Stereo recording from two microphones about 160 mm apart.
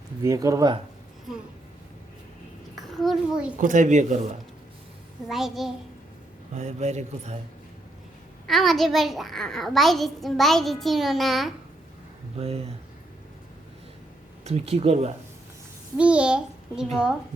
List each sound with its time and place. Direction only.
0.2 s speech: 20° right (ahead or behind)
1.3 s a child's voice: centre (ahead or behind)
2.9 s a child's voice: centre (ahead or behind)
3.6 s speech: 50° right (ahead or behind)
5.3 s a child's voice: centre (ahead or behind)
6.5 s speech: 45° right (ahead or behind)
8.4 s a child's voice: centre (ahead or behind)
12.4 s speech: 40° right (ahead or behind)
14.4 s speech: 40° right (ahead or behind)
16.0 s a child's voice: 5° right (ahead or behind)